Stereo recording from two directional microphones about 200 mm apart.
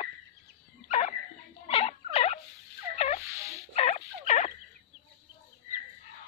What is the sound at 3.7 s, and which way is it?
Turkey, 30° left (ahead or behind).